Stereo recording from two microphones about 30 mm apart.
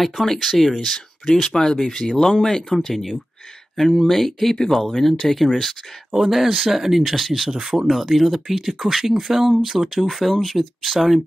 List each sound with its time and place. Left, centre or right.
0.0 s speech: centre
0.9 s speech: centre
2.9 s speech: centre
6.1 s speech: centre
10.8 s speech: centre